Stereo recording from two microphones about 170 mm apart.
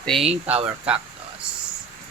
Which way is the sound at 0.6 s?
10° right (ahead or behind).